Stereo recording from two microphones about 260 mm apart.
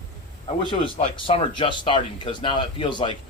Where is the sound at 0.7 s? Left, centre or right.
Centre.